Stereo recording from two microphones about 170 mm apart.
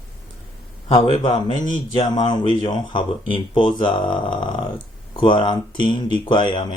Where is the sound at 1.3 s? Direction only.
25° left (ahead or behind).